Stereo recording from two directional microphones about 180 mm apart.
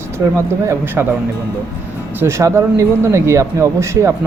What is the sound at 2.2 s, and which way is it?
Speech, 15° right (ahead or behind).